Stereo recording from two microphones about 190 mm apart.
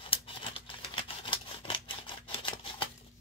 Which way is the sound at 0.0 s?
25° left (ahead or behind).